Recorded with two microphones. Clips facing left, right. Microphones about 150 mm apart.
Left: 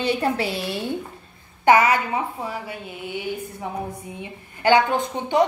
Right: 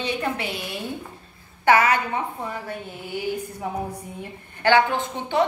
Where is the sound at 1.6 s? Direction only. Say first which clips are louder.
Left 2 dB; 15° left (ahead or behind).